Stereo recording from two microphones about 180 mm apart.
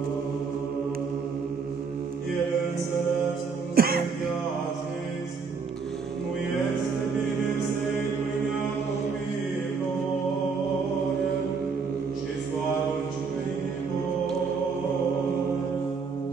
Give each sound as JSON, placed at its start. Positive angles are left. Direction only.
{"t": 3.7, "sound": "music", "side_deg": -55}